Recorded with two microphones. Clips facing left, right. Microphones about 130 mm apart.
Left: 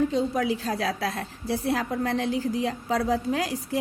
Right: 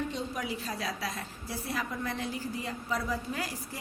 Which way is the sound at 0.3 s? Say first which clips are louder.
Left 9 dB; 90° left.